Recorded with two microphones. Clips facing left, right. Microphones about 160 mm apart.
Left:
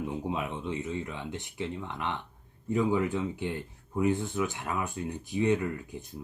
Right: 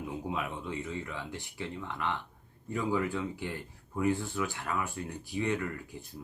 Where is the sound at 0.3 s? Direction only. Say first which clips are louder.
Left 3 dB; 25° left (ahead or behind).